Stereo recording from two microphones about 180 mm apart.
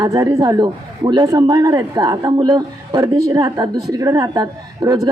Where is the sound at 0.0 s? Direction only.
20° right (ahead or behind).